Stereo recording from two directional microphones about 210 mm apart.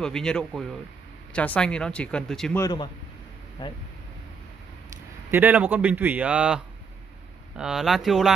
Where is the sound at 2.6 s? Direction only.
20° left (ahead or behind).